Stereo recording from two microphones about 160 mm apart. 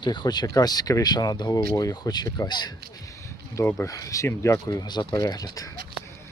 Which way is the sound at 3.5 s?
15° left (ahead or behind).